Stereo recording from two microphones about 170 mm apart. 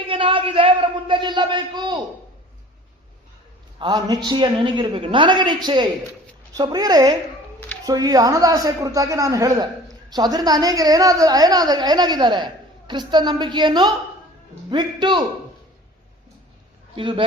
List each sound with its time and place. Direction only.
0.0 s speech: 30° right (ahead or behind)
3.8 s speech: 25° right (ahead or behind)
16.9 s a man's voice: 30° right (ahead or behind)